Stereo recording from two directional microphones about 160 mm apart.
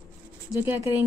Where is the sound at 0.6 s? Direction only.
15° right (ahead or behind).